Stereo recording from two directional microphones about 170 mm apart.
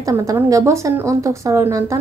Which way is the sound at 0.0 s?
20° right (ahead or behind).